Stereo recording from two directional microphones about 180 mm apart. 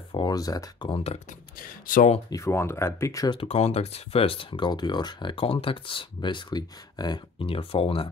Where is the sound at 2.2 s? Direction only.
15° left (ahead or behind).